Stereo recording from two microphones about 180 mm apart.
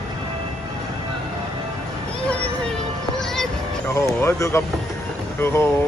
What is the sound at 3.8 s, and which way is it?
Speech, 15° left (ahead or behind).